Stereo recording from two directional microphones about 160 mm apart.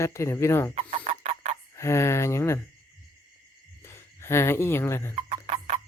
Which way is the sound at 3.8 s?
15° left (ahead or behind).